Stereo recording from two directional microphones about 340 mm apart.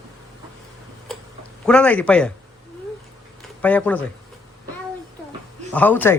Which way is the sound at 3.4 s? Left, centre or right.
Centre.